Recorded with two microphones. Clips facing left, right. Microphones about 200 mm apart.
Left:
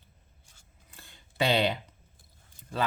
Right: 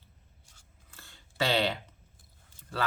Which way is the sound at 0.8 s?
15° left (ahead or behind).